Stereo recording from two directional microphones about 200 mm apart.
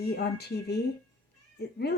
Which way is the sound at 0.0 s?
55° left (ahead or behind).